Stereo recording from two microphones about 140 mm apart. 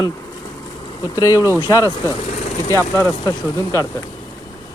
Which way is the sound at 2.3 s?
55° left (ahead or behind).